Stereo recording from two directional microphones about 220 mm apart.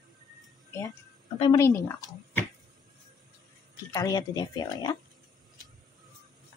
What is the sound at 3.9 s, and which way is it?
Speech, 15° left (ahead or behind).